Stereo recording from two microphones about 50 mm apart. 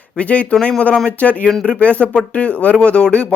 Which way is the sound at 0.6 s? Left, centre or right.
Centre.